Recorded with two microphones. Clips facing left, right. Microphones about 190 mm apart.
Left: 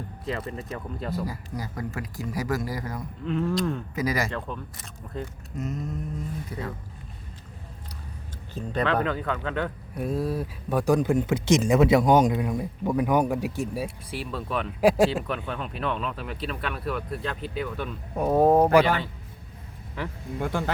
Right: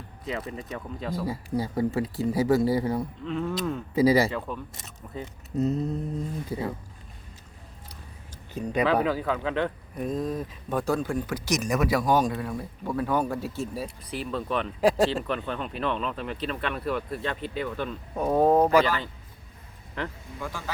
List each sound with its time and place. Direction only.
0.3 s speech: centre (ahead or behind)
1.5 s speech: 30° right (ahead or behind)
3.2 s speech: centre (ahead or behind)
3.9 s speech: 30° right (ahead or behind)
4.3 s speech: 5° right (ahead or behind)
5.5 s a sound: 35° right (ahead or behind)
6.5 s speech: 25° right (ahead or behind)
8.5 s speech: 10° right (ahead or behind); by 18.7 s 10° left (ahead or behind)
20.4 s speech: 60° left (ahead or behind)